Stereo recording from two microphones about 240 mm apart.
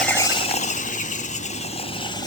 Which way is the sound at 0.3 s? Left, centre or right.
Left.